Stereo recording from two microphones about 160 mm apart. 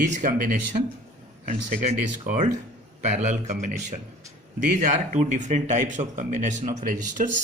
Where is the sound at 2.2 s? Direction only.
50° right (ahead or behind).